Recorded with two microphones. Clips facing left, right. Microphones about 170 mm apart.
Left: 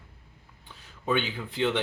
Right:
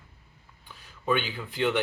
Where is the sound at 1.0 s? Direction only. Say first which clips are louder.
Even; 25° left (ahead or behind).